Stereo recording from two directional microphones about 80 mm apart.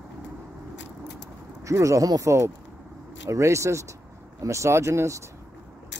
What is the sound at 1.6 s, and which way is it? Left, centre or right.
Speech, right.